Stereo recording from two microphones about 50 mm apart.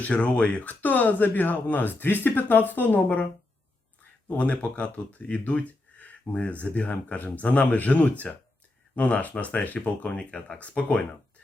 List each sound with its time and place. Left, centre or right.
0.0 s speech: left
4.3 s speech: left